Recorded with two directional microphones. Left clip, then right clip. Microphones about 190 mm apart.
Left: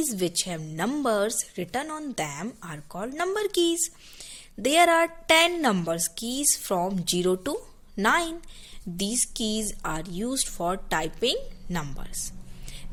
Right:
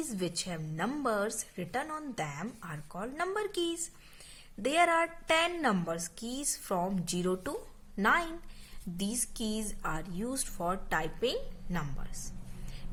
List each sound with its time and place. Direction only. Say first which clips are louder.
0.1 s a woman's voice: left 8 dB; 30° left (ahead or behind)